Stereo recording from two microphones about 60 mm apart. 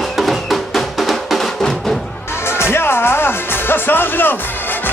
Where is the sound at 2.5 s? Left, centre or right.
Left.